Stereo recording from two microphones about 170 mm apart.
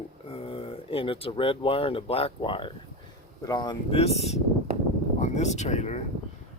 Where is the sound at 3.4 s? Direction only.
25° left (ahead or behind); by 6.0 s 40° left (ahead or behind).